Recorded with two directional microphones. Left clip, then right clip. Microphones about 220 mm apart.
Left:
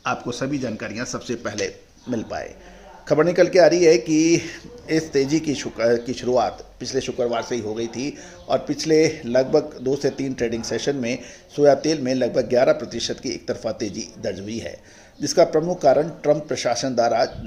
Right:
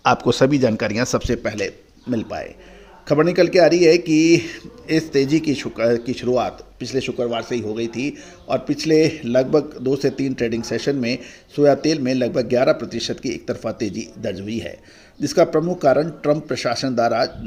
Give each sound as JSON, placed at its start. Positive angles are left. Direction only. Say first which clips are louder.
{"t": 0.0, "sound": "a man's voice", "louder": "right 9 dB", "side_deg": -45}